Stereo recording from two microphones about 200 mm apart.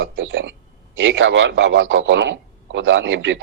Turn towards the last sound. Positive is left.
turn(degrees=-75)  # may be behind; listen again after turning